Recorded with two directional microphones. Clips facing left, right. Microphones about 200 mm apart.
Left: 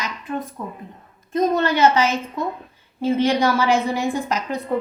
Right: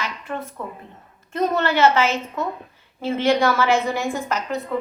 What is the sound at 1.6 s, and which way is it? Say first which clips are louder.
A woman's voice: even; 15° left (ahead or behind).